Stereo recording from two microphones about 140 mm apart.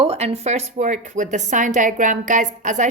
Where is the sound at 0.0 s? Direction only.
45° right (ahead or behind).